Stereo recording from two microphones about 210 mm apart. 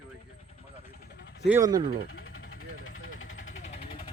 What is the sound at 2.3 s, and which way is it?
Vehicle, 80° left.